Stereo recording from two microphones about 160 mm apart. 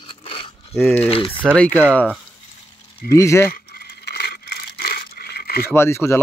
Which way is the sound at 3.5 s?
80° left.